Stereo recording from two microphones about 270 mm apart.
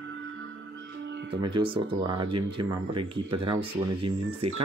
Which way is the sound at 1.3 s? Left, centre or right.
Centre.